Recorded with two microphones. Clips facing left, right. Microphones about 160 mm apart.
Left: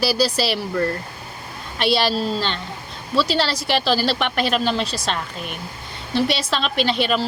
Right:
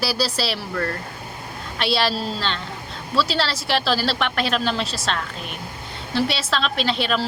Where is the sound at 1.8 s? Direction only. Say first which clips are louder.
Left 3 dB; centre (ahead or behind).